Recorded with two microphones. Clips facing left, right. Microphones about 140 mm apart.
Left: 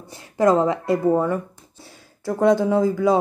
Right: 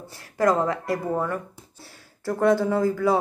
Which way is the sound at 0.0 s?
20° left (ahead or behind).